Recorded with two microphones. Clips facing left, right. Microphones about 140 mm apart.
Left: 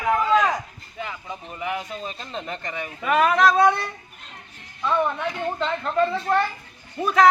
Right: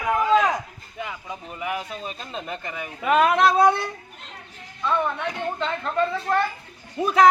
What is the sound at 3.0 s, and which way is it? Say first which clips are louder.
Speech: right 1 dB; 20° right (ahead or behind).